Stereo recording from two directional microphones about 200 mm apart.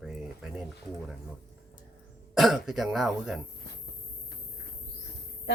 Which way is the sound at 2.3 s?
Centre (ahead or behind).